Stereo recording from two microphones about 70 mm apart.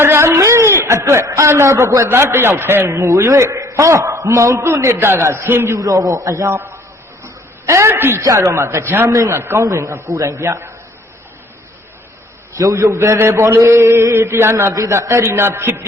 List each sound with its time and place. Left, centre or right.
0.0 s a sound: right
2.0 s a man's voice: right
5.7 s a man's voice: right
6.5 s a man's voice: right
8.2 s a man's voice: right
12.6 s a man's voice: right